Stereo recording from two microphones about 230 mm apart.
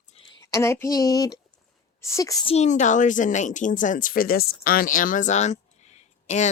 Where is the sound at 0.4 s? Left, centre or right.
Centre.